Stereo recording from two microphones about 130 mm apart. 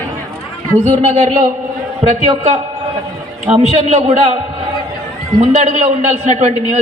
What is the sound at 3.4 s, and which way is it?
Speech, 60° right (ahead or behind).